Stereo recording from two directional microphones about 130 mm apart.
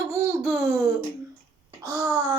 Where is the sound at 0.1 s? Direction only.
20° right (ahead or behind).